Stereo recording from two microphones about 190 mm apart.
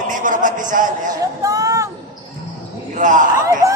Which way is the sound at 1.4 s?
20° right (ahead or behind).